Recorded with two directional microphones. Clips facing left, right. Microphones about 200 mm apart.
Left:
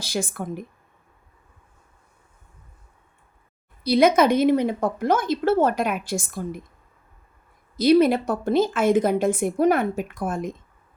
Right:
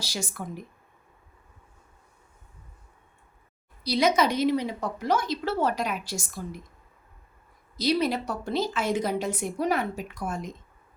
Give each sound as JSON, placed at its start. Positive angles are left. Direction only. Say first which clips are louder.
{"t": 0.0, "sound": "a woman's voice", "louder": "left 7 dB", "side_deg": 55}
{"t": 3.8, "sound": "a woman's voice", "louder": "left 6 dB", "side_deg": 55}
{"t": 7.8, "sound": "a woman's voice", "louder": "left 9 dB", "side_deg": 55}